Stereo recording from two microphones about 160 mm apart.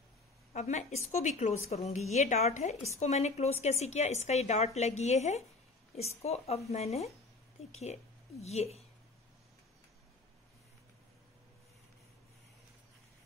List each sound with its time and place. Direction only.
0.6 s a woman's voice: 45° left (ahead or behind)